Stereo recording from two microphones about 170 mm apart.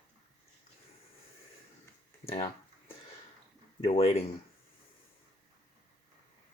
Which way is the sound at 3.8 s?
35° left (ahead or behind).